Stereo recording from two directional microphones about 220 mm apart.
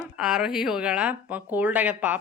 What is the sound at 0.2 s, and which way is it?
A woman's voice, 5° right (ahead or behind).